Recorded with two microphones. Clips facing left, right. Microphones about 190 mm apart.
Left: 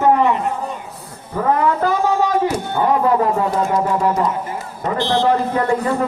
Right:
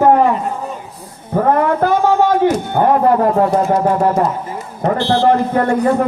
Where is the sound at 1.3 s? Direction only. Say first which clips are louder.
Right 3 dB; 50° right (ahead or behind).